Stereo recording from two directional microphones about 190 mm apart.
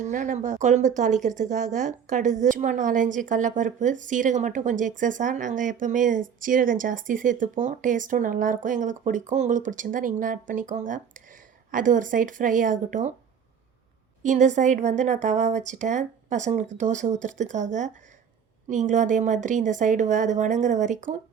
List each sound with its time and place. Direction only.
0.0 s a woman's voice: 40° right (ahead or behind)
14.3 s a woman's voice: 40° right (ahead or behind)